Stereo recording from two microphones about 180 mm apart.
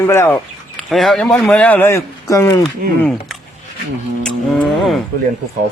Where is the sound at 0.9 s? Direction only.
Centre (ahead or behind); by 2.6 s 20° left (ahead or behind).